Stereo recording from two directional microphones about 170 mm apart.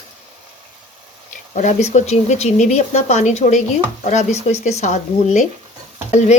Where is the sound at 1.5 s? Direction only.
45° left (ahead or behind).